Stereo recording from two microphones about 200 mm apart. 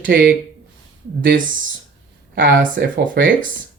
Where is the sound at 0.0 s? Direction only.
45° right (ahead or behind).